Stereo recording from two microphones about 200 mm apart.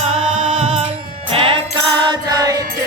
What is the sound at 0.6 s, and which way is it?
Music, 30° right (ahead or behind).